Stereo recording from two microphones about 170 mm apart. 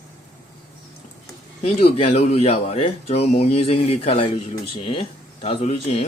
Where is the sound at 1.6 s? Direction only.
35° left (ahead or behind).